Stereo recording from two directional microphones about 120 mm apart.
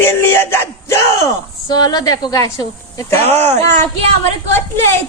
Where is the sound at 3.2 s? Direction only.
60° right (ahead or behind).